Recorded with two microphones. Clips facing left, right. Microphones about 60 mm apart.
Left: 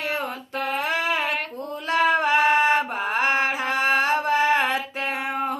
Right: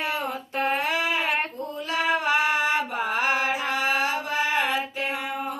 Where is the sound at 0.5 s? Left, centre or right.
Right.